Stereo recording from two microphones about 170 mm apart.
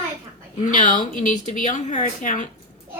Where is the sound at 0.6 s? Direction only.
50° left (ahead or behind).